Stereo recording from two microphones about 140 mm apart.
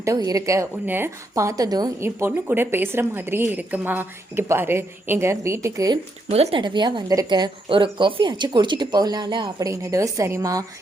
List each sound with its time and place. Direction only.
0.3 s a woman's voice: 25° right (ahead or behind)
6.3 s a woman's voice: 45° right (ahead or behind)
6.6 s a woman's voice: 35° right (ahead or behind)